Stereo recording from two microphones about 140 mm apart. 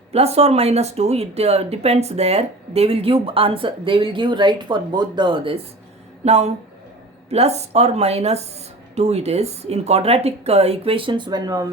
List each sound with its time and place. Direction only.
0.1 s speech: 45° right (ahead or behind)
6.2 s speech: 50° right (ahead or behind); by 11.7 s 25° right (ahead or behind)